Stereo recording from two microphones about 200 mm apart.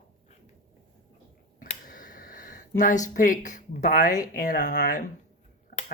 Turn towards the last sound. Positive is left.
turn(degrees=45)  # may be behind; listen again after turning